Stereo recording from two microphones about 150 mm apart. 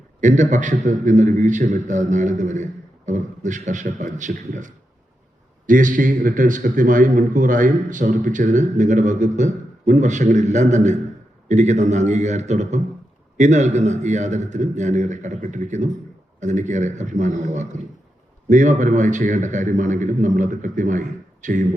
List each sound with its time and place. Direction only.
0.2 s a man's voice: 55° right (ahead or behind)